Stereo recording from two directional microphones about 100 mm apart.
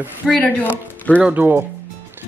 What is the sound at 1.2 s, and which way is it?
Speech, 15° right (ahead or behind).